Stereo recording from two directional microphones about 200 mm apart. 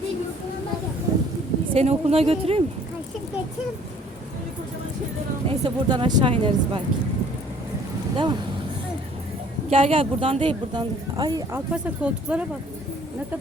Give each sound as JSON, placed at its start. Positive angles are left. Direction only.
{"t": 1.7, "sound": "speech", "side_deg": -30}
{"t": 5.5, "sound": "speech", "side_deg": -25}
{"t": 8.1, "sound": "speech", "side_deg": -25}
{"t": 9.6, "sound": "speech", "side_deg": -30}
{"t": 11.7, "sound": "speech", "side_deg": -5}